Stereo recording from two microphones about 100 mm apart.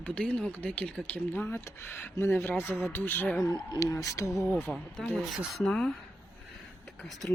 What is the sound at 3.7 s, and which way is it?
Speech, 35° left (ahead or behind).